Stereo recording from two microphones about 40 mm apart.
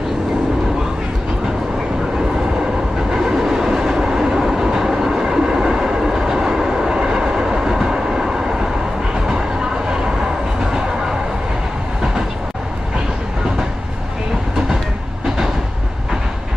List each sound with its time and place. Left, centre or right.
3.1 s train: centre
10.6 s train: centre